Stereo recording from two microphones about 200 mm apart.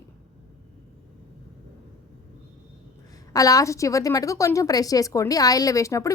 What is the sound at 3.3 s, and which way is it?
A woman's voice, 15° left (ahead or behind).